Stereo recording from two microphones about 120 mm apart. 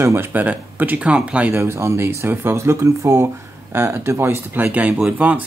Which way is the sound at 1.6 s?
25° right (ahead or behind).